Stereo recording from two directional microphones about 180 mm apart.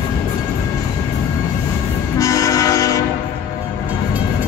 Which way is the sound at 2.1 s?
20° left (ahead or behind).